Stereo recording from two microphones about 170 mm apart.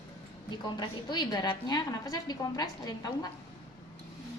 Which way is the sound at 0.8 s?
25° left (ahead or behind).